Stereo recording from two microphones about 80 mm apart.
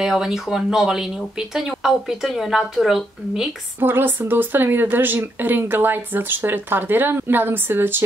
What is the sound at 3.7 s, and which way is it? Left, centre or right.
Speech, right.